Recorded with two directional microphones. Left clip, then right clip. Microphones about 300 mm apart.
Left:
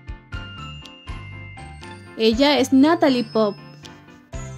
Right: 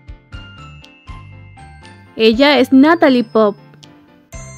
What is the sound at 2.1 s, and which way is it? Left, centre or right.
Speech, right.